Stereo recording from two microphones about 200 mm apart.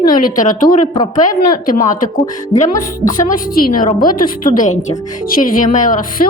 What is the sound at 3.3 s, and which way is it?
Speech, 45° left (ahead or behind).